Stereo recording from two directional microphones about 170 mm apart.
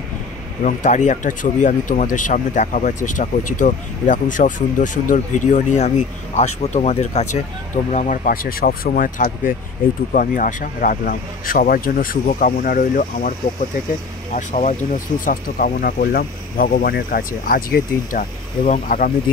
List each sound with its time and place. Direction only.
0.7 s speech: 45° left (ahead or behind)
14.3 s speech: 45° left (ahead or behind)